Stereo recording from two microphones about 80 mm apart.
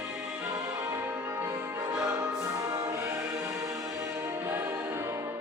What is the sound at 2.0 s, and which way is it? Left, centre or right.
Music, right.